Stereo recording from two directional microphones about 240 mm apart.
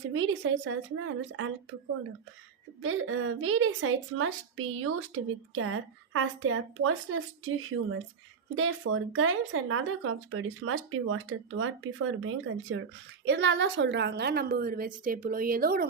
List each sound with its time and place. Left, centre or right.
0.1 s speech: right
2.8 s speech: right
8.5 s speech: right
13.2 s a woman's voice: right